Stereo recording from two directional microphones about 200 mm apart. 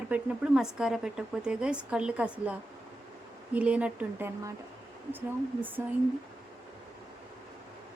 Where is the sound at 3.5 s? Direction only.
5° right (ahead or behind).